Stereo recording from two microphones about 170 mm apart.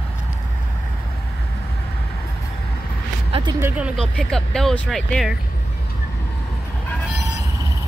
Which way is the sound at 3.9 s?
5° left (ahead or behind).